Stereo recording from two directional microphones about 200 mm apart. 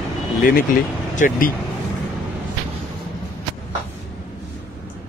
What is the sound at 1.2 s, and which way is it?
Speech, 45° left (ahead or behind).